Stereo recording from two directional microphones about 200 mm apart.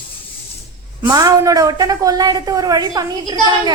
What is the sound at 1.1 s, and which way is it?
A woman's voice, 15° right (ahead or behind).